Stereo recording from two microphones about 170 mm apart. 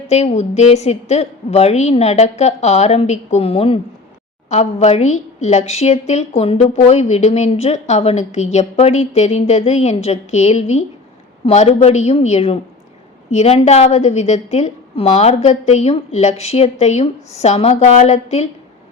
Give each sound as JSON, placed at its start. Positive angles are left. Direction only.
{"t": 0.1, "sound": "a woman's voice", "side_deg": 40}